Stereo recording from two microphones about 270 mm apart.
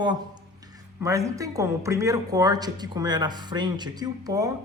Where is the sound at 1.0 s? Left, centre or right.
Centre.